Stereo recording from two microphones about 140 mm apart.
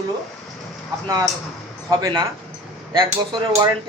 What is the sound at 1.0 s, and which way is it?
Speech, 25° right (ahead or behind).